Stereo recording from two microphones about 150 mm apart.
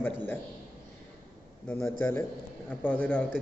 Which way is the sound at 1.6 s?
15° left (ahead or behind).